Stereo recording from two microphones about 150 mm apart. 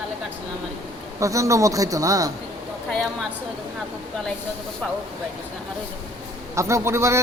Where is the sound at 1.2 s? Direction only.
20° right (ahead or behind).